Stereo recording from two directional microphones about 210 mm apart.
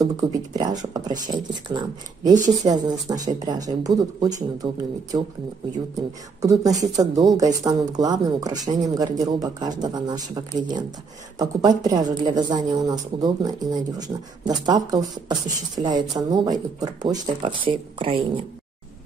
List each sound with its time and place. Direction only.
0.0 s speech: 20° right (ahead or behind)
6.4 s speech: 15° right (ahead or behind)